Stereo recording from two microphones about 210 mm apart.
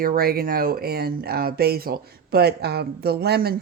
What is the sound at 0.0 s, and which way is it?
A woman's voice, 45° right (ahead or behind).